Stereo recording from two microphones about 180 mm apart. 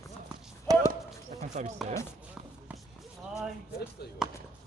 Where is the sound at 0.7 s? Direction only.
20° right (ahead or behind).